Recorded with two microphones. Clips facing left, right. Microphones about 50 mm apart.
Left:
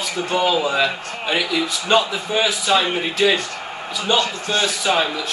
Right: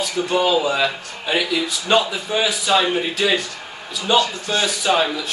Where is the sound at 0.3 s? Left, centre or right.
Centre.